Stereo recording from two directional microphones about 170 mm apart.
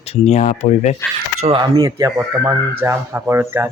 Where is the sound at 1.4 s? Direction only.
30° right (ahead or behind).